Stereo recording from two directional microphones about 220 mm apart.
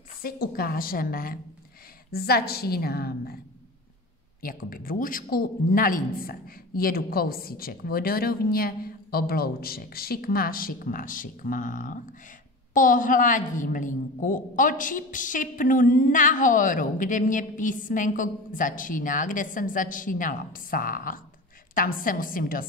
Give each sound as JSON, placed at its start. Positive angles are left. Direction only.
{"t": 0.2, "sound": "a woman's voice", "side_deg": 40}
{"t": 4.4, "sound": "a woman's voice", "side_deg": 40}